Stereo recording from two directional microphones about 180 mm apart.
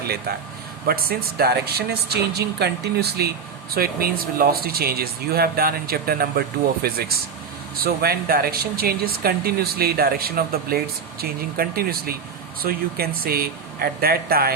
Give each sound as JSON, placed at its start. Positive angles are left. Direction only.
{"t": 0.9, "sound": "a woman's voice", "side_deg": -55}